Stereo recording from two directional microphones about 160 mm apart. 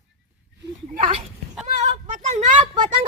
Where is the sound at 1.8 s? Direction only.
45° right (ahead or behind).